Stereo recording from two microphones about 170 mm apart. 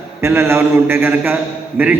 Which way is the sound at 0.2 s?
15° right (ahead or behind).